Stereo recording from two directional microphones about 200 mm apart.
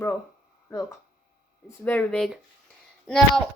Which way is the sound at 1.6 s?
10° left (ahead or behind).